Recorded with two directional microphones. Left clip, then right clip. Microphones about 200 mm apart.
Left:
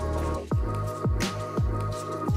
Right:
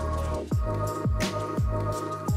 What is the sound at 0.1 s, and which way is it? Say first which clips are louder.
Music: left 1 dB; centre (ahead or behind).